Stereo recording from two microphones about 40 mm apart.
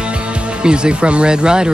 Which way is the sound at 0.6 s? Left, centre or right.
Right.